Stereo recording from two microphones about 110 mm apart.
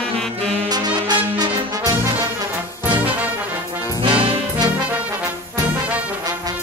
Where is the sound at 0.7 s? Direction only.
40° right (ahead or behind).